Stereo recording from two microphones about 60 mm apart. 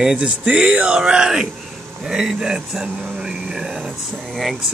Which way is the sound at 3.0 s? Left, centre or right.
Centre.